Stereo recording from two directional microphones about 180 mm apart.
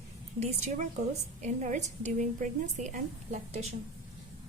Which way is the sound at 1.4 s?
40° right (ahead or behind).